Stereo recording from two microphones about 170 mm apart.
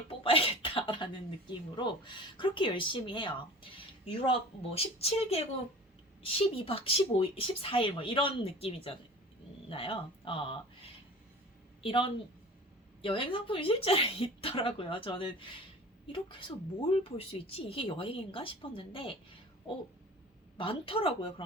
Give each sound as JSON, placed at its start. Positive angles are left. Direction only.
{"t": 0.1, "sound": "speech", "side_deg": 30}
{"t": 20.6, "sound": "speech", "side_deg": 30}